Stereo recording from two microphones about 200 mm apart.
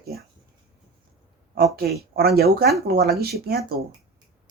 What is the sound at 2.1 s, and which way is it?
Speech, 50° right (ahead or behind).